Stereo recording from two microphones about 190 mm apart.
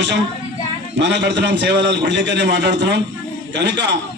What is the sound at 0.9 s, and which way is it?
A man's voice, 65° right (ahead or behind).